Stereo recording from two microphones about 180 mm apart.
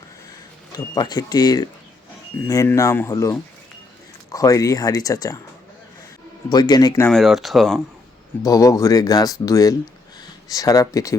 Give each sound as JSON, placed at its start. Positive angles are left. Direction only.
{"t": 0.7, "sound": "speech", "side_deg": 20}
{"t": 6.5, "sound": "speech", "side_deg": 20}
{"t": 7.1, "sound": "speech", "side_deg": 0}
{"t": 8.4, "sound": "speech", "side_deg": 20}